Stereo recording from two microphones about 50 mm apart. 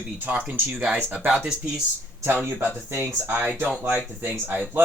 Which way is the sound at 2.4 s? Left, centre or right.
Right.